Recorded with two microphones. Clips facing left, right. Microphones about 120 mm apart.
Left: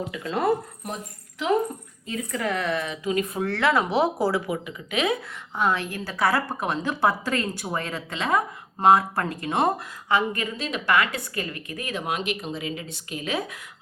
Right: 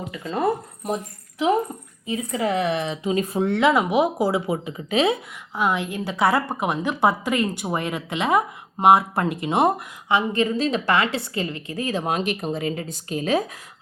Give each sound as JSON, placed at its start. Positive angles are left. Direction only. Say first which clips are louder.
{"t": 0.1, "sound": "a woman's voice", "louder": "right 1 dB", "side_deg": -5}
{"t": 2.0, "sound": "a woman's voice", "louder": "right 4 dB", "side_deg": -20}
{"t": 4.5, "sound": "speech", "louder": "right 5 dB", "side_deg": -35}
{"t": 5.5, "sound": "a woman's voice", "louder": "right 2 dB", "side_deg": -15}